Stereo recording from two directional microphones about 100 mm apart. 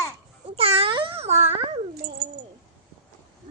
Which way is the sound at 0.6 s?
85° right.